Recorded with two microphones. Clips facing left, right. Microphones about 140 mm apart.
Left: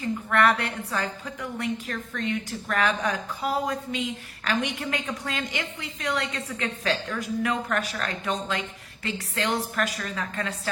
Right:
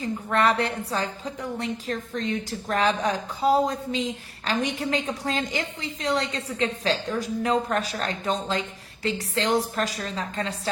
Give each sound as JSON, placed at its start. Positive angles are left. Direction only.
{"t": 0.3, "sound": "a woman's voice", "side_deg": -25}